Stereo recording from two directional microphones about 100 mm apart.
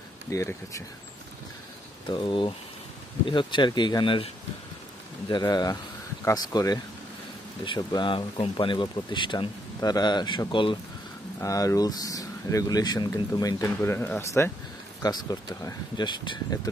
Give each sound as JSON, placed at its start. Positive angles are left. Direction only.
{"t": 0.3, "sound": "speech", "side_deg": 30}
{"t": 2.0, "sound": "speech", "side_deg": 55}
{"t": 5.3, "sound": "speech", "side_deg": 45}
{"t": 7.6, "sound": "speech", "side_deg": 55}
{"t": 9.8, "sound": "speech", "side_deg": 40}
{"t": 11.4, "sound": "speech", "side_deg": 35}
{"t": 13.9, "sound": "speech", "side_deg": 20}
{"t": 14.2, "sound": "speech", "side_deg": 30}
{"t": 15.0, "sound": "speech", "side_deg": 45}